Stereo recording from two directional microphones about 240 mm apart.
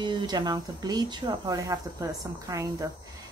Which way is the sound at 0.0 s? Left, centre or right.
Centre.